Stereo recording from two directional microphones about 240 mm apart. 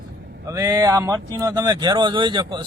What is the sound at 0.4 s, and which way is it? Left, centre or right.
Speech, centre.